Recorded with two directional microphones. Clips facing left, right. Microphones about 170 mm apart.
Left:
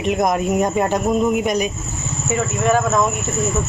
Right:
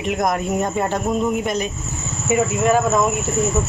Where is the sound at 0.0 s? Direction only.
20° left (ahead or behind).